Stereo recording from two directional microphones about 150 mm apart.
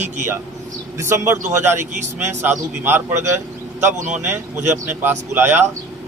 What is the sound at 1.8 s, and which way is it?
Speech, 50° right (ahead or behind).